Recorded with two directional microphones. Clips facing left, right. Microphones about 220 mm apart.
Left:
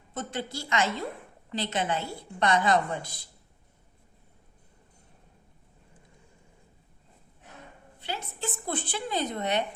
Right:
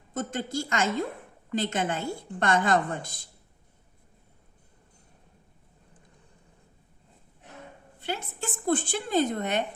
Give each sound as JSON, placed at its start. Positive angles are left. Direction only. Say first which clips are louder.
{"t": 0.1, "sound": "a woman's voice", "louder": "right 3 dB", "side_deg": -45}
{"t": 8.0, "sound": "a woman's voice", "louder": "right 2 dB", "side_deg": -50}